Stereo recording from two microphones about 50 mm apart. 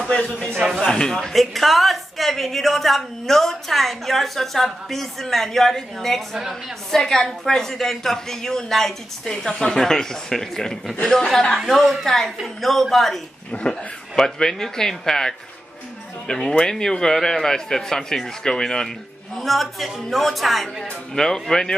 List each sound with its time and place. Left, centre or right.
0.1 s a man's voice: left
1.3 s a woman's voice: centre
13.5 s speech: left
14.1 s a woman's voice: centre